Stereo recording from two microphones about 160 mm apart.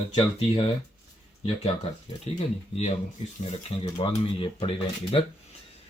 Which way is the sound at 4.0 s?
35° left (ahead or behind).